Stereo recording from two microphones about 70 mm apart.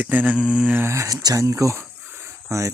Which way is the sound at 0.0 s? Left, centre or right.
Right.